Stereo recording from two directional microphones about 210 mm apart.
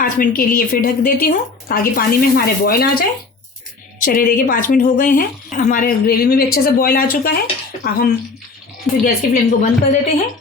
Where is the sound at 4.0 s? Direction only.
40° left (ahead or behind).